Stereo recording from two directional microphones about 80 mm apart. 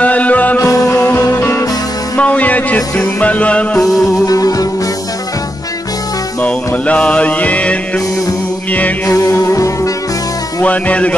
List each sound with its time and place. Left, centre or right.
0.0 s music: centre
0.6 s music: left
0.9 s music: left
2.1 s music: centre
3.8 s music: left
6.4 s mantra: centre
8.7 s music: centre
9.1 s music: left
10.6 s music: centre